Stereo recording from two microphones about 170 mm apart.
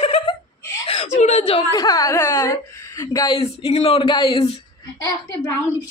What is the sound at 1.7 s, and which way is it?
A woman's voice, 20° left (ahead or behind).